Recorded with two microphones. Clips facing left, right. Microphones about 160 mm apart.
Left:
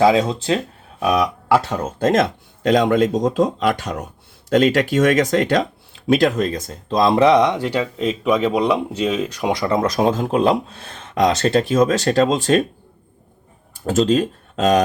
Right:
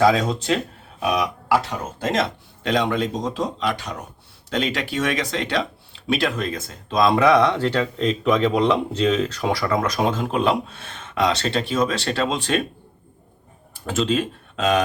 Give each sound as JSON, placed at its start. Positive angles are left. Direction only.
{"t": 0.0, "sound": "speech", "side_deg": 25}
{"t": 0.9, "sound": "speech", "side_deg": 45}
{"t": 2.6, "sound": "speech", "side_deg": 45}
{"t": 9.9, "sound": "speech", "side_deg": 40}
{"t": 13.8, "sound": "speech", "side_deg": 40}